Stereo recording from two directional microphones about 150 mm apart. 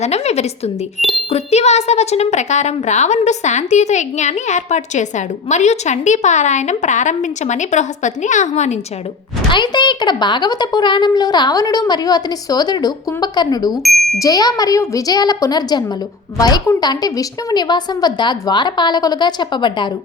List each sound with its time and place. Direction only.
0.0 s a woman's voice: 45° left (ahead or behind)
0.9 s speech: centre (ahead or behind)
1.3 s a woman's voice: 45° left (ahead or behind)
9.5 s speech: 30° left (ahead or behind)
13.8 s speech: centre (ahead or behind)
14.2 s speech: 25° left (ahead or behind)